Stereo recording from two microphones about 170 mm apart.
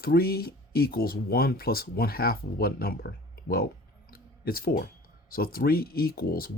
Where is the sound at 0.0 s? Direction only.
60° left (ahead or behind).